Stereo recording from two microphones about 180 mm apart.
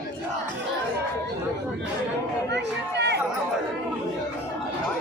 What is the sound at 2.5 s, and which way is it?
Speech, 70° right (ahead or behind).